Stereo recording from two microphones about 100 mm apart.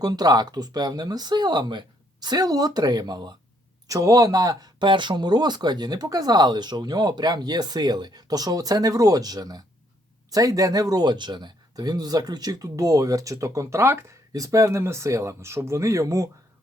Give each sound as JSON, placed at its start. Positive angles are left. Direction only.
{"t": 0.0, "sound": "speech", "side_deg": -40}